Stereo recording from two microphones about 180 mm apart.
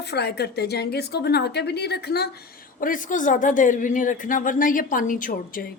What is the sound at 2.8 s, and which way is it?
A woman's voice, 45° left (ahead or behind).